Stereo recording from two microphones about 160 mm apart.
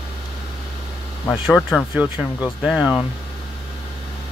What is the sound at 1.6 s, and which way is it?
Speech, 10° left (ahead or behind).